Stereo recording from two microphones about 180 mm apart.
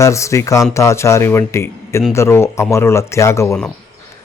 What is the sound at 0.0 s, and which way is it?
Speech, 15° left (ahead or behind).